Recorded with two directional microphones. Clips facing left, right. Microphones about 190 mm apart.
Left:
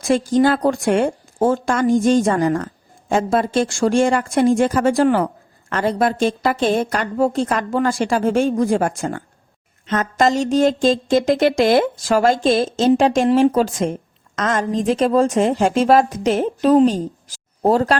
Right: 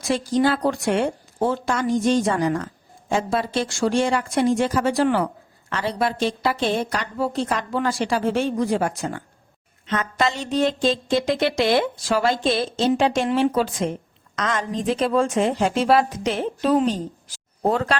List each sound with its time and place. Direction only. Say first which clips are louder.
0.0 s speech: left 5 dB; 50° left (ahead or behind)